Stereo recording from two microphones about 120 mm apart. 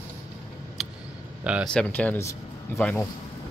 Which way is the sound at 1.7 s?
15° left (ahead or behind).